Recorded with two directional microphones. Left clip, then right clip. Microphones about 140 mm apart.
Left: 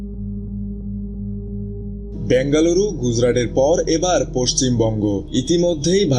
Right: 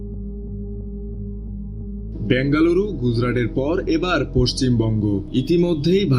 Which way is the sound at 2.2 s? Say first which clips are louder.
Left 3 dB; 30° right (ahead or behind).